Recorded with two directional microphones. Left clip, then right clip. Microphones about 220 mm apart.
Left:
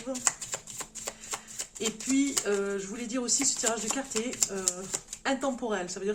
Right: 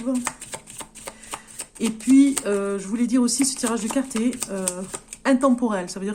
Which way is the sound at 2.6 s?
50° right (ahead or behind).